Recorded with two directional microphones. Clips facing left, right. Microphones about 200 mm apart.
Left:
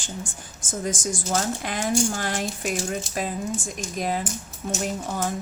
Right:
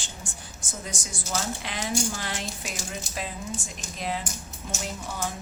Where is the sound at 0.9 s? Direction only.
90° left.